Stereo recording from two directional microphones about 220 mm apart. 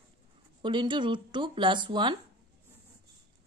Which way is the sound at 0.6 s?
20° right (ahead or behind).